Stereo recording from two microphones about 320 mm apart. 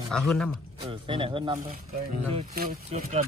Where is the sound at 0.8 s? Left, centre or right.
Centre.